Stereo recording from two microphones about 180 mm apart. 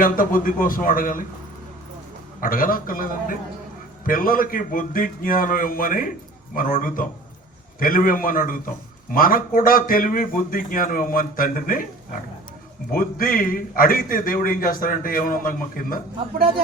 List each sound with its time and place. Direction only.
0.0 s a man's voice: 50° left (ahead or behind)
2.4 s a man's voice: 50° left (ahead or behind)
12.9 s a man's voice: 50° left (ahead or behind)